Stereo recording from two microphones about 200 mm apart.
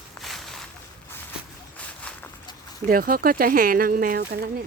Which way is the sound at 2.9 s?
45° right (ahead or behind).